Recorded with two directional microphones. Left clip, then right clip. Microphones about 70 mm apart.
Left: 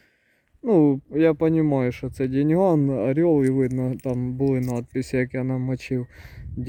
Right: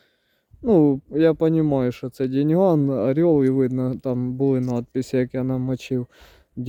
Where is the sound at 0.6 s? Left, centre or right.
Right.